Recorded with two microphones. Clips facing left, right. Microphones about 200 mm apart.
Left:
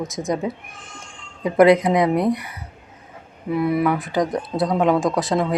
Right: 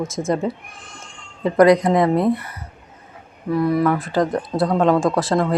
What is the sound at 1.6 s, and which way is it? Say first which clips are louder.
Speech: even; 25° left (ahead or behind).